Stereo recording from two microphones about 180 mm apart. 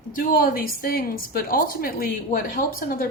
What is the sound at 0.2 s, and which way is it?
A woman's voice, 55° left (ahead or behind).